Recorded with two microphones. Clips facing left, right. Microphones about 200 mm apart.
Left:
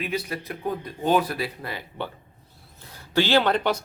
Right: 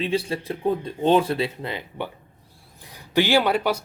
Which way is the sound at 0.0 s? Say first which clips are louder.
Right 5 dB; 30° right (ahead or behind).